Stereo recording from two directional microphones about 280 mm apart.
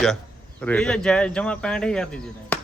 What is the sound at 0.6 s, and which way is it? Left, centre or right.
A man's voice, centre.